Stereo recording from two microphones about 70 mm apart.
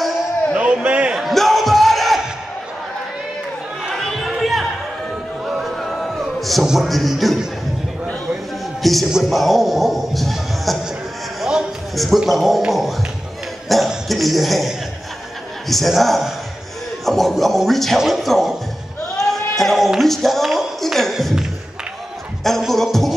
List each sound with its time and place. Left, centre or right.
0.6 s a man's voice: centre
1.1 s a sound: centre
3.9 s chatter: centre
5.4 s music: centre
9.1 s speech: centre
11.9 s a man's voice: centre
19.1 s a sound: centre
22.4 s music: centre